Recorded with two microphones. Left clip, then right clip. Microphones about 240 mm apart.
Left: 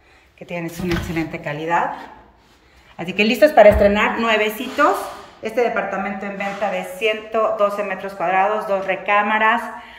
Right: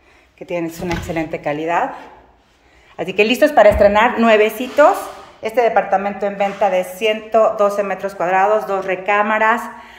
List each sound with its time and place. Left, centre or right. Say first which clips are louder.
0.5 s speech: right 3 dB; centre
3.0 s a woman's voice: right 1 dB; centre